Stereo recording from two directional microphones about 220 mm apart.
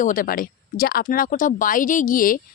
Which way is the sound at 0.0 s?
40° left (ahead or behind).